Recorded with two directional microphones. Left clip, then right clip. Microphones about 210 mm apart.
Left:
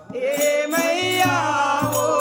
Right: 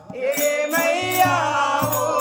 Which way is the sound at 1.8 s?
15° left (ahead or behind).